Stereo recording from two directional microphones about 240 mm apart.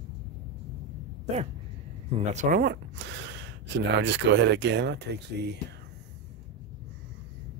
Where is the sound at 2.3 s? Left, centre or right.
Right.